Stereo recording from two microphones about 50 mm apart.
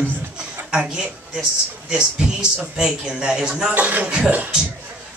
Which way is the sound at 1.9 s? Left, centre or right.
Centre.